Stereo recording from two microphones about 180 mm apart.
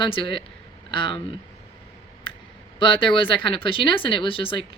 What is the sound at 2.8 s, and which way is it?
Speech, 30° left (ahead or behind).